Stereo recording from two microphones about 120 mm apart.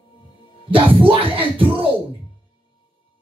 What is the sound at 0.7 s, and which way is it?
Music, 45° right (ahead or behind).